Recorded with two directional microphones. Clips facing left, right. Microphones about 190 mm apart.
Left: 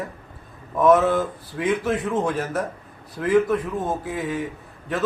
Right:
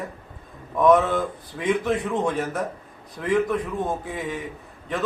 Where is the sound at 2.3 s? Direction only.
Centre (ahead or behind).